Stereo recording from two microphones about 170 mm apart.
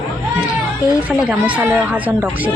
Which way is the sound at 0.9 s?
5° right (ahead or behind).